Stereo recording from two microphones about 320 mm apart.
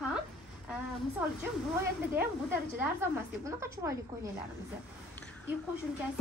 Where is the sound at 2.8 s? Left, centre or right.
Centre.